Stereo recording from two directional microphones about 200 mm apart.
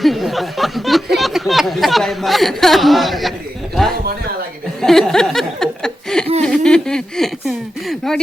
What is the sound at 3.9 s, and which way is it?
Speech, 50° right (ahead or behind).